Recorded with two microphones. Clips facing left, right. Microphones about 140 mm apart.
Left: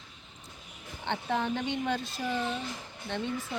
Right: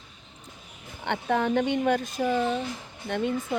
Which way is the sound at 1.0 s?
55° right (ahead or behind).